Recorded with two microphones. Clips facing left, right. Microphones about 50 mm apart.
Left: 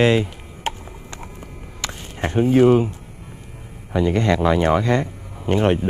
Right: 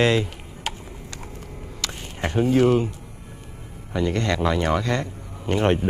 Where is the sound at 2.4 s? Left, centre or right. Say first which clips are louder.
Left 4 dB; centre.